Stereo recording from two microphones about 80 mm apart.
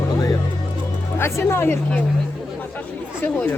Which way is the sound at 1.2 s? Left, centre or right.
Left.